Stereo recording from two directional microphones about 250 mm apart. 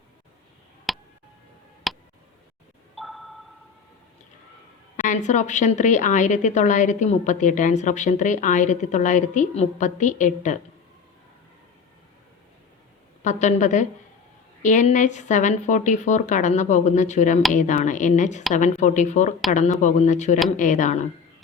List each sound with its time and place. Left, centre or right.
0.9 s tick: centre
2.9 s a sound: centre
5.0 s a woman's voice: left
13.2 s a woman's voice: left